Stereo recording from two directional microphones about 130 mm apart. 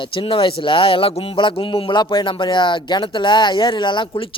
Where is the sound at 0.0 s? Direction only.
45° left (ahead or behind).